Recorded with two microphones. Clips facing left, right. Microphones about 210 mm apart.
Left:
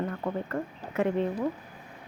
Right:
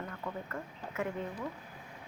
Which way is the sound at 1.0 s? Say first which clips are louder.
Left 14 dB; 85° left.